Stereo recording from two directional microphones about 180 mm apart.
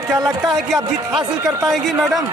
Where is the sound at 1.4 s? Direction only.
20° right (ahead or behind).